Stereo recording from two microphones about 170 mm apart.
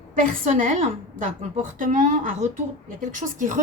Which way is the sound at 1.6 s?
50° right (ahead or behind).